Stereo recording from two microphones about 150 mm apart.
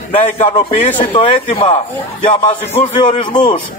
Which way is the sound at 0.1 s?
35° left (ahead or behind).